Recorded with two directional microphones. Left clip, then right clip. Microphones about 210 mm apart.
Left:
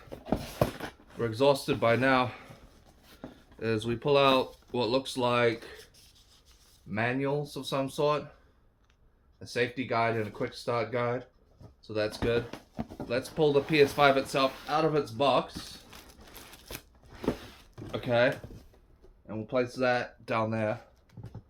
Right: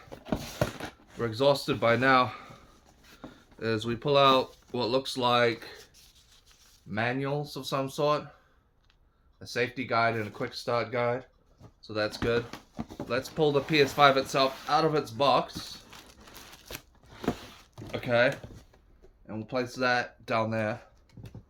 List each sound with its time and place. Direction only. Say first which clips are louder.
0.8 s speech: even; 20° right (ahead or behind)
6.9 s speech: even; 25° right (ahead or behind)
9.4 s speech: even; 20° right (ahead or behind)
15.9 s a sound: right 1 dB; 15° right (ahead or behind)
19.3 s speech: left 2 dB; 25° right (ahead or behind)